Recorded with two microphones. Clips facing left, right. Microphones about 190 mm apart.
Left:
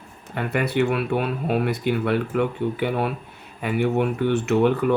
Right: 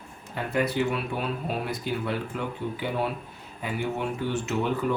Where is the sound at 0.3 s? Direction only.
65° left (ahead or behind).